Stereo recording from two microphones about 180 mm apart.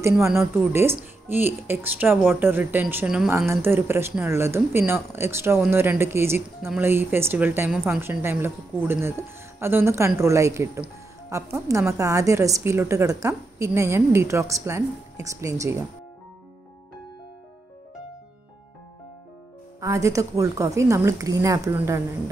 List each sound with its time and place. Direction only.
0.4 s a woman's voice: 15° right (ahead or behind)
19.8 s a woman's voice: 15° right (ahead or behind)